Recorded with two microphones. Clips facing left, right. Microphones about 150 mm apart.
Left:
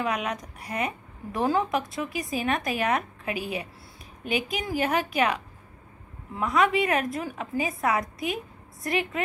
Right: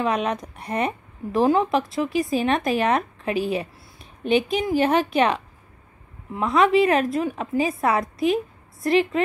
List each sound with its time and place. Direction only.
0.0 s a woman's voice: 30° right (ahead or behind)